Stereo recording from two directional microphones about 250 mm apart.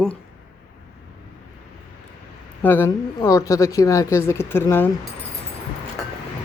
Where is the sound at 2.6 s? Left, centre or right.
Centre.